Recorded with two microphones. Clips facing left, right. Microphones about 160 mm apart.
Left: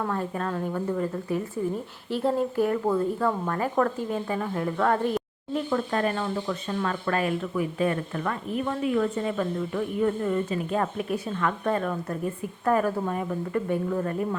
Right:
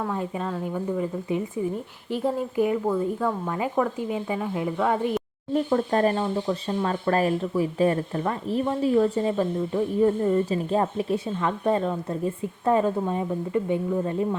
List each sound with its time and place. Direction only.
0.0 s speech: 15° right (ahead or behind)
5.5 s a woman's voice: 35° right (ahead or behind); by 14.3 s 20° right (ahead or behind)